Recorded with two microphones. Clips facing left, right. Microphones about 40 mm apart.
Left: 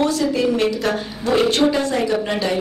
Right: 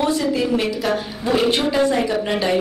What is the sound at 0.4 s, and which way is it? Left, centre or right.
A woman's voice, centre.